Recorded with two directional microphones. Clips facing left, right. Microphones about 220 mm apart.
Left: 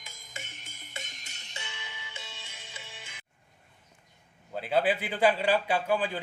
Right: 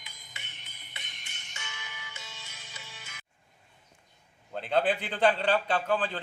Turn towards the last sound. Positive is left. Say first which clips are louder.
# left 1 dB
turn(degrees=10)  # may be behind; listen again after turning